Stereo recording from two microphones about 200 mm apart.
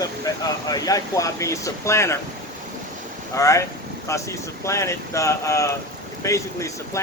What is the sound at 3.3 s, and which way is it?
Speech, 15° left (ahead or behind).